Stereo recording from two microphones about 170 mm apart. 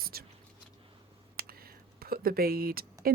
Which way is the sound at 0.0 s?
65° right (ahead or behind).